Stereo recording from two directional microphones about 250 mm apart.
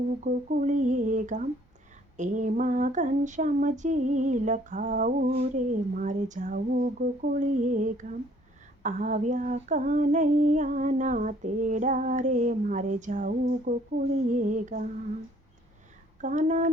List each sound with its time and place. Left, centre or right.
0.3 s female singing: right
16.2 s female singing: right